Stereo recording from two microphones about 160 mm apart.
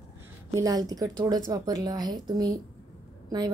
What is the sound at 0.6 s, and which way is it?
A woman's voice, 20° right (ahead or behind).